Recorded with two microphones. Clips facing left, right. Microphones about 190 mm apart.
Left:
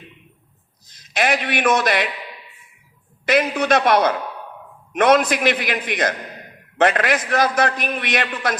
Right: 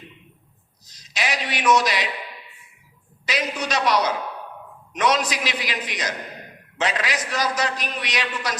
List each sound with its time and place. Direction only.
0.9 s a man's voice: 55° left (ahead or behind)
3.2 s a man's voice: 55° left (ahead or behind)